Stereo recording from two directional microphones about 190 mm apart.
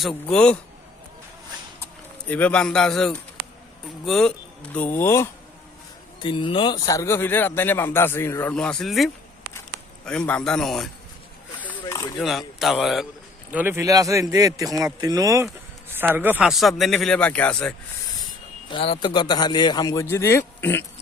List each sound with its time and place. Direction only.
0.3 s speech: 5° left (ahead or behind)
1.8 s speech: 10° left (ahead or behind)
6.1 s speech: 25° left (ahead or behind); by 9.0 s centre (ahead or behind)
10.1 s speech: 5° left (ahead or behind)
11.6 s a sound: 10° left (ahead or behind)
12.2 s speech: centre (ahead or behind)
18.7 s a man's voice: 25° left (ahead or behind); by 20.8 s 10° left (ahead or behind)